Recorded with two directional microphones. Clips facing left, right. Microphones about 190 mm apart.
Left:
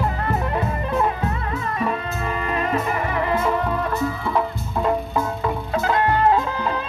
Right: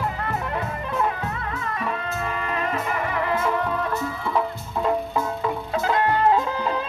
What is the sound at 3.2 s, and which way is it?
Music, 20° left (ahead or behind).